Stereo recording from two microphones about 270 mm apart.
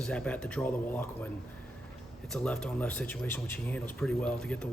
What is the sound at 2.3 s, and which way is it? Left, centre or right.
Speech, centre.